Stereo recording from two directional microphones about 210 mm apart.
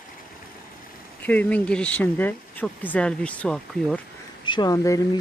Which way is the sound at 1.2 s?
5° left (ahead or behind).